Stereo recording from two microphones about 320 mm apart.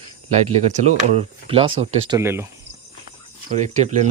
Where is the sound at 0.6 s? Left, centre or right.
Right.